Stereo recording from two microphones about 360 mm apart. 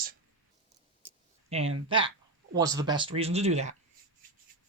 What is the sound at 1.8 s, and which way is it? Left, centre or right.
Speech, centre.